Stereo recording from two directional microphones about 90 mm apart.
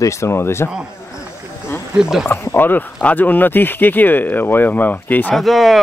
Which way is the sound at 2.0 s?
5° right (ahead or behind).